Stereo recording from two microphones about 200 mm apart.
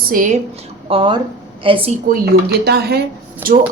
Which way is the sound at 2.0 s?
55° right (ahead or behind).